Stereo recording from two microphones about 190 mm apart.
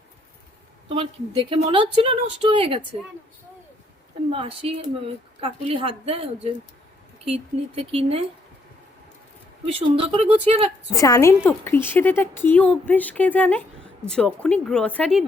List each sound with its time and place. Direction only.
0.9 s a woman's voice: 25° right (ahead or behind)
4.3 s a woman's voice: 30° right (ahead or behind)
7.5 s speech: 35° right (ahead or behind)
9.7 s speech: 30° right (ahead or behind)
10.9 s a woman's voice: 15° left (ahead or behind)